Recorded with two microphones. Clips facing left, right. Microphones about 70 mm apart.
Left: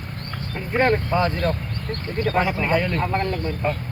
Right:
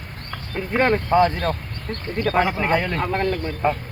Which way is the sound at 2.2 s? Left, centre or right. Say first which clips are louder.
Right 2 dB; right.